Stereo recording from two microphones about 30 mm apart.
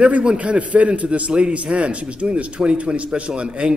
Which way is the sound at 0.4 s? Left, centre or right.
Right.